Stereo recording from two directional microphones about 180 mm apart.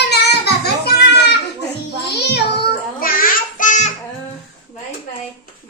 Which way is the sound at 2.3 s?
60° left (ahead or behind).